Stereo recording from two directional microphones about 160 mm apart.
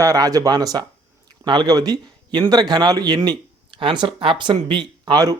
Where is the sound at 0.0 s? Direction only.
20° right (ahead or behind).